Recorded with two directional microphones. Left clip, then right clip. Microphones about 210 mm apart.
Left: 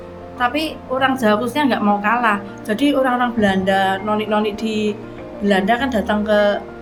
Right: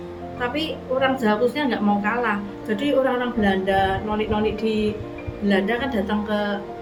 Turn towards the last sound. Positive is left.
turn(degrees=50)  # may be behind; listen again after turning